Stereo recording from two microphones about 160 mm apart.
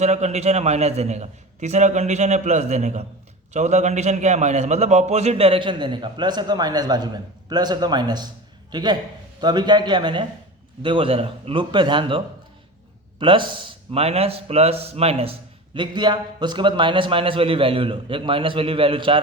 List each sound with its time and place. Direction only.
0.0 s a man's voice: 45° right (ahead or behind)